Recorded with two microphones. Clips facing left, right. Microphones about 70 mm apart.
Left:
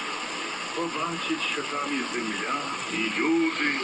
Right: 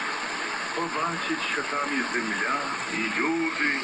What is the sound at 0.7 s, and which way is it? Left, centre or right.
Speech, right.